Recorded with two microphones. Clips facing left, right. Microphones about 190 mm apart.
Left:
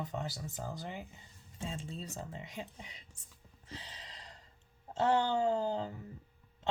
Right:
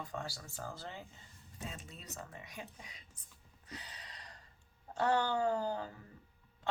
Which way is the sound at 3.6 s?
25° left (ahead or behind).